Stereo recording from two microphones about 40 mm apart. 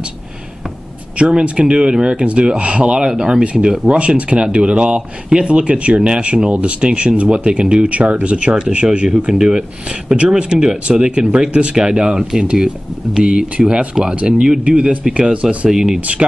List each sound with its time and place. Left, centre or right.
1.1 s speech: right
9.8 s speech: right; by 13.2 s centre
13.2 s speech: right
16.0 s speech: right